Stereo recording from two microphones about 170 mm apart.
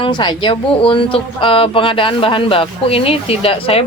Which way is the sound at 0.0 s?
25° left (ahead or behind).